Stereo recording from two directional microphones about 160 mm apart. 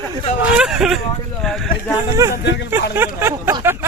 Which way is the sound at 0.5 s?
5° right (ahead or behind).